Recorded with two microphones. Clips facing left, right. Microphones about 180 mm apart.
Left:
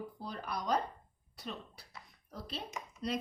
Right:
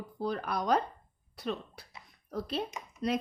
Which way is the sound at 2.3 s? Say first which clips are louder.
Right 10 dB; 60° right (ahead or behind).